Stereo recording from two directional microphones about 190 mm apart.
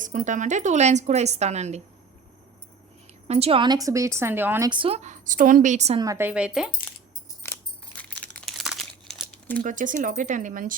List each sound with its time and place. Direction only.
0.0 s speech: 45° right (ahead or behind)
3.2 s a woman's voice: 35° right (ahead or behind); by 4.7 s 10° right (ahead or behind)
4.7 s speech: 30° right (ahead or behind)
6.0 s a woman's voice: 15° right (ahead or behind)
8.2 s crumpling: centre (ahead or behind)
9.6 s speech: 45° right (ahead or behind)